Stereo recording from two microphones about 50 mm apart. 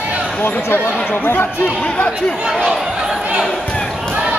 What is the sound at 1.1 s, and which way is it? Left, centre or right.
Speech, left.